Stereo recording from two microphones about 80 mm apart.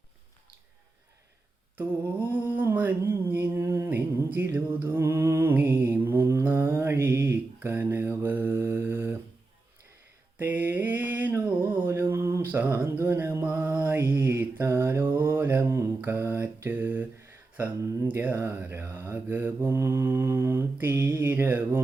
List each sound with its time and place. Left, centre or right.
1.8 s mantra: right
10.3 s a sound: right
12.4 s mantra: right